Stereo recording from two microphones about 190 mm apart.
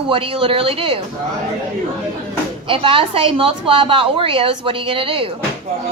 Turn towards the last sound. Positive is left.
turn(degrees=-30)  # may be behind; listen again after turning